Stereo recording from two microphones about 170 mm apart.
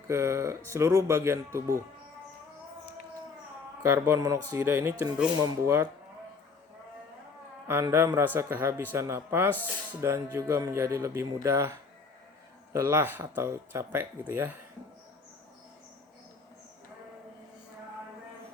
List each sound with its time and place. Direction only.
0.1 s speech: 15° right (ahead or behind)
3.8 s speech: 15° right (ahead or behind)
7.7 s speech: 15° right (ahead or behind)